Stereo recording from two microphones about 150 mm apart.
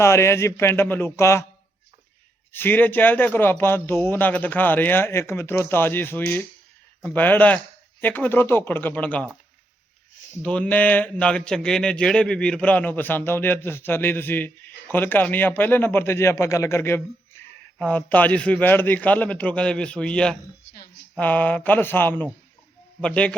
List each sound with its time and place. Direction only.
0.0 s speech: 15° left (ahead or behind)
2.5 s speech: 15° left (ahead or behind)
10.4 s speech: 10° left (ahead or behind)